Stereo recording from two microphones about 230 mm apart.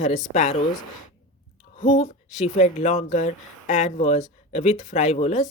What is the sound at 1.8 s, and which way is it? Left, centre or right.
Speech, left.